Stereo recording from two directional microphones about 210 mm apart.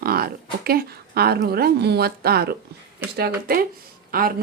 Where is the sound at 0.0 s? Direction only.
45° right (ahead or behind).